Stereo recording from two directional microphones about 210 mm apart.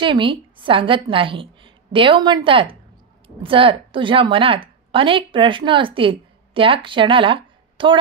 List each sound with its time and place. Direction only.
0.0 s a woman's voice: 25° right (ahead or behind)